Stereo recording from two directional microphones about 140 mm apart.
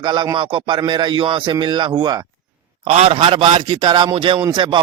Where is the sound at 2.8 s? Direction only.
45° right (ahead or behind).